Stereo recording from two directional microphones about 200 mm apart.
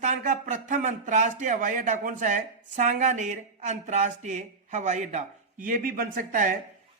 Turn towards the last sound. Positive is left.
turn(degrees=-40)  # may be behind; listen again after turning